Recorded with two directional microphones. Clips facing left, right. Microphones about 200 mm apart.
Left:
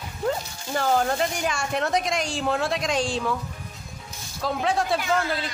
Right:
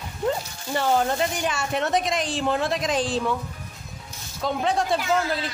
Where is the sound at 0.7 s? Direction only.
Centre (ahead or behind).